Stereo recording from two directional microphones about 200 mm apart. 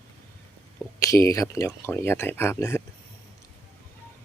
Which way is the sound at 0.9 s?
15° left (ahead or behind).